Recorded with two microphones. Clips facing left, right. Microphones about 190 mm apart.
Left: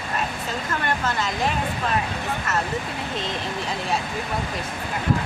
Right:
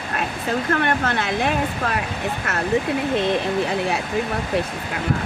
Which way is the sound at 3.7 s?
65° right (ahead or behind).